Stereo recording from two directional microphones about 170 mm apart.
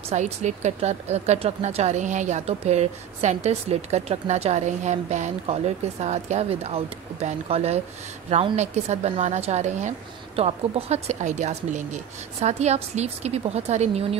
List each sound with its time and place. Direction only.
0.1 s speech: 40° right (ahead or behind)